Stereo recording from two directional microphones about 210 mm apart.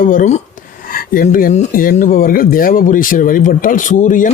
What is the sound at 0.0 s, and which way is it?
Speech, 40° left (ahead or behind).